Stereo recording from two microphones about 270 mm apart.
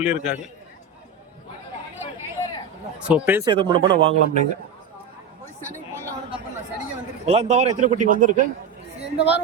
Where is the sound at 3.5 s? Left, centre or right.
Centre.